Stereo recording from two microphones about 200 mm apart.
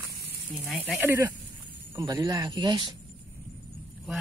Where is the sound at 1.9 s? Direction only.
15° right (ahead or behind).